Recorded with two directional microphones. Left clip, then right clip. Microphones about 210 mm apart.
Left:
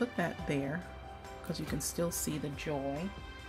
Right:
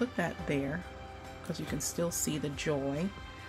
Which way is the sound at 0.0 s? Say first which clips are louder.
Right 1 dB; centre (ahead or behind).